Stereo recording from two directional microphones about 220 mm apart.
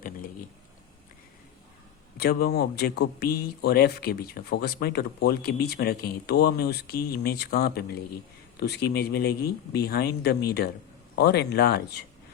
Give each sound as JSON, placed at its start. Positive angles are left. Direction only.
{"t": 2.1, "sound": "speech", "side_deg": 45}